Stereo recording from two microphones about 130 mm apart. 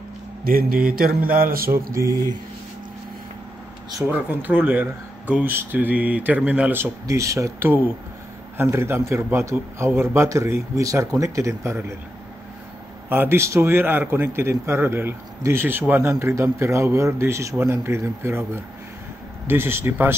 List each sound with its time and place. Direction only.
0.5 s mantra: 90° right
4.1 s a man's voice: 15° right (ahead or behind)
13.1 s a man's voice: 15° right (ahead or behind)
19.4 s speech: 15° right (ahead or behind)